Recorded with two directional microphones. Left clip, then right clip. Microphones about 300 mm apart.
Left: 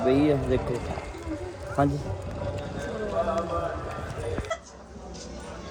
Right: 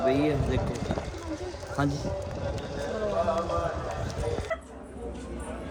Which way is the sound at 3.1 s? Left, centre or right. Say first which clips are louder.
Even; right.